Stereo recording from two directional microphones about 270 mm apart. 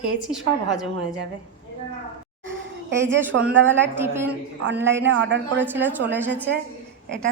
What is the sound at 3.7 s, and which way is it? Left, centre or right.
A woman's voice, centre.